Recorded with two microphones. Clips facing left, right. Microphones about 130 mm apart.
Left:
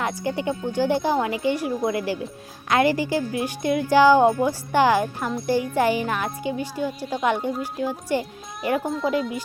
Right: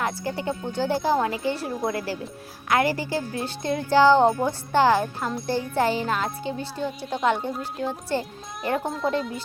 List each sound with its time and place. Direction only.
0.0 s speech: 20° left (ahead or behind); by 9.3 s centre (ahead or behind)